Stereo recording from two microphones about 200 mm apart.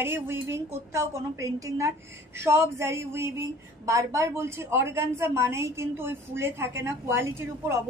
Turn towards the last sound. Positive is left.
turn(degrees=-10)  # may be behind; listen again after turning